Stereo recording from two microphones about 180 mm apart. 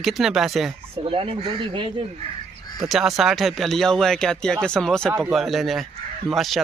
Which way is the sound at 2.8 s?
Centre (ahead or behind).